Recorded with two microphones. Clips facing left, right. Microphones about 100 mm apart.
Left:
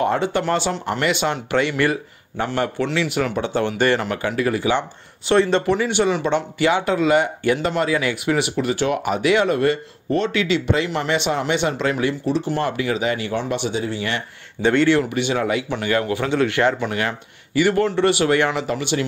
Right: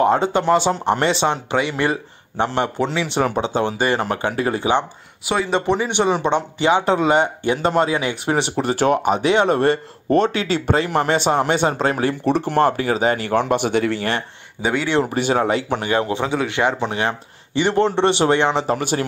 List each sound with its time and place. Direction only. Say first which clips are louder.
0.0 s speech: right 3 dB; 25° right (ahead or behind)
4.0 s speech: right 1 dB; 30° right (ahead or behind)
5.2 s speech: left 4 dB; 10° right (ahead or behind)
5.7 s speech: even; 20° right (ahead or behind); by 9.0 s 40° right (ahead or behind)
9.0 s speech: right 2 dB; 25° right (ahead or behind)
12.3 s speech: right 4 dB; 55° right (ahead or behind); by 13.4 s 40° right (ahead or behind)
13.4 s speech: right 5 dB; 55° right (ahead or behind)
14.6 s speech: left 5 dB; 10° right (ahead or behind)
15.0 s speech: right 2 dB; 40° right (ahead or behind)
18.8 s speech: right 1 dB; 40° right (ahead or behind)